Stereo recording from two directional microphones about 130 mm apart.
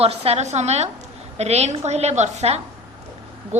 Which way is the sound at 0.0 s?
50° right (ahead or behind).